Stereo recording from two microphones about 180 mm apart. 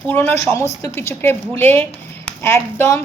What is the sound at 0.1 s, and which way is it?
A woman's voice, 10° left (ahead or behind).